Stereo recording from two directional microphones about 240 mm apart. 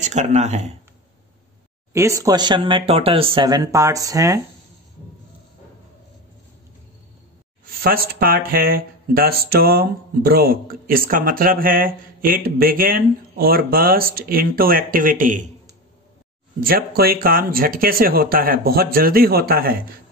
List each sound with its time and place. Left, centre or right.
0.0 s speech: right
2.0 s speech: centre
7.6 s speech: right
16.6 s speech: right